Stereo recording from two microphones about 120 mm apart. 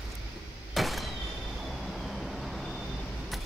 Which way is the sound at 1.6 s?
Centre (ahead or behind).